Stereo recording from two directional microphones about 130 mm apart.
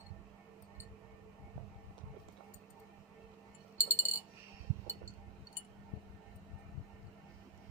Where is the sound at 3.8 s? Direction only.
25° left (ahead or behind).